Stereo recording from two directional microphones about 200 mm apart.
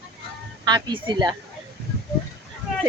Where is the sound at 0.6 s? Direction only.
20° right (ahead or behind).